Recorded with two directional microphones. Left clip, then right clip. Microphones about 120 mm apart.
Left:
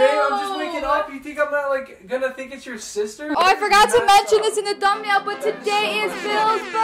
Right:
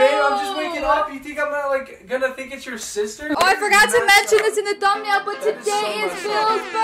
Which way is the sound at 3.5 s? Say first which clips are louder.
Even; 25° left (ahead or behind).